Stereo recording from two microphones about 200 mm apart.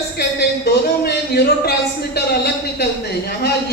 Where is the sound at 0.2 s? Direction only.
55° left (ahead or behind).